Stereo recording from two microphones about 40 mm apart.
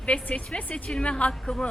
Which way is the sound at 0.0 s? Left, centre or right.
Left.